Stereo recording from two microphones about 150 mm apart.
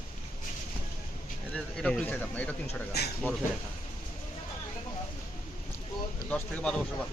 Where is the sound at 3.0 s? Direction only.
90° left.